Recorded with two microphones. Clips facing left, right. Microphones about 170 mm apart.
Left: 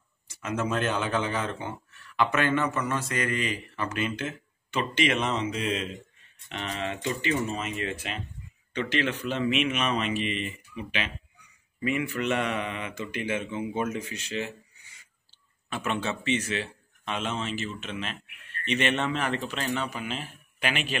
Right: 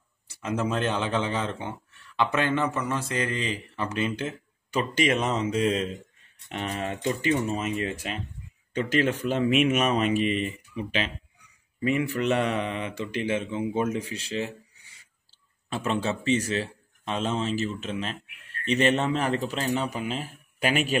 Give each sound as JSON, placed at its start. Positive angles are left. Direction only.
{"t": 0.3, "sound": "a man's voice", "side_deg": -30}
{"t": 15.7, "sound": "a man's voice", "side_deg": -30}